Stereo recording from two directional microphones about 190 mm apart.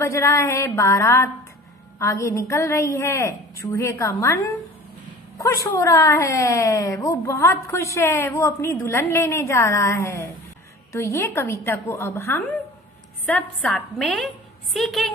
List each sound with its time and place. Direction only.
0.0 s a woman's voice: 15° left (ahead or behind)